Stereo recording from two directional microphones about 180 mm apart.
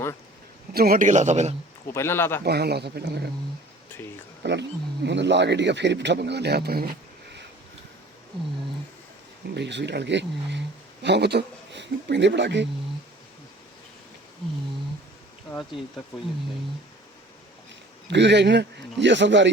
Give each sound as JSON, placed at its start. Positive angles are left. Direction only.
{"t": 0.7, "sound": "a man's voice", "side_deg": -55}
{"t": 1.9, "sound": "speech", "side_deg": 15}
{"t": 2.4, "sound": "speech", "side_deg": -65}
{"t": 4.4, "sound": "speech", "side_deg": -75}
{"t": 9.6, "sound": "speech", "side_deg": -75}
{"t": 18.1, "sound": "speech", "side_deg": -75}